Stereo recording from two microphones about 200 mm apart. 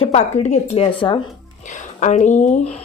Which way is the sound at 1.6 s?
35° left (ahead or behind).